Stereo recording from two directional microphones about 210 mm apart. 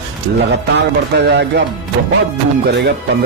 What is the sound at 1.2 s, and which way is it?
Speech, 50° right (ahead or behind).